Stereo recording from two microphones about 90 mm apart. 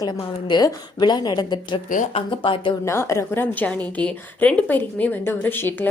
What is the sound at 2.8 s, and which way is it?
A woman's voice, 30° left (ahead or behind).